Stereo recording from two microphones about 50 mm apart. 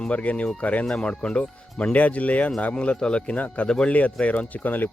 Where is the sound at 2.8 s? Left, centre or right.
Centre.